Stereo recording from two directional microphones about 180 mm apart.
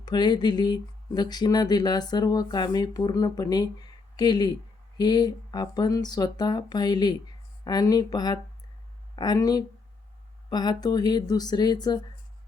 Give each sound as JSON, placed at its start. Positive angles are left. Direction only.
{"t": 0.0, "sound": "speech", "side_deg": 25}